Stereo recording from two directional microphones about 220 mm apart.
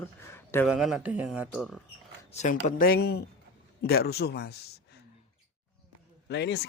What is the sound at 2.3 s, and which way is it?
Speech, 35° left (ahead or behind).